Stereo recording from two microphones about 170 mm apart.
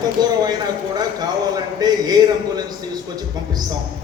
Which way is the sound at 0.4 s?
25° right (ahead or behind).